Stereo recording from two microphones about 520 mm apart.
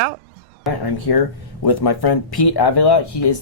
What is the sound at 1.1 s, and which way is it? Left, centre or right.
Speech, left.